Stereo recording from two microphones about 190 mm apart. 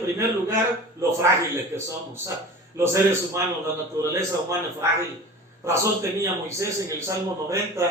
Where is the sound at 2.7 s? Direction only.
15° right (ahead or behind).